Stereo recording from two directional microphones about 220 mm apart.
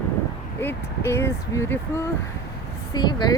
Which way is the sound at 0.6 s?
10° left (ahead or behind).